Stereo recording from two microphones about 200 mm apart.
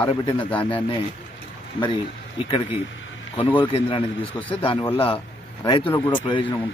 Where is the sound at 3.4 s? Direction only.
25° left (ahead or behind).